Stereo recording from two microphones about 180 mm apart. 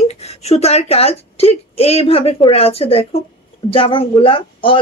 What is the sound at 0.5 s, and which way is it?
A woman's voice, 35° left (ahead or behind).